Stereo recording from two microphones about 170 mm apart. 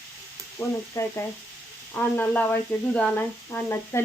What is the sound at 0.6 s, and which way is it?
Speech, 15° left (ahead or behind).